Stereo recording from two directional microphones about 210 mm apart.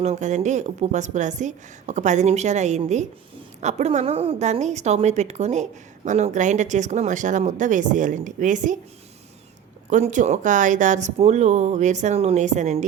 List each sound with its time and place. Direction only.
0.0 s a woman's voice: 35° right (ahead or behind)
9.9 s a woman's voice: 35° right (ahead or behind)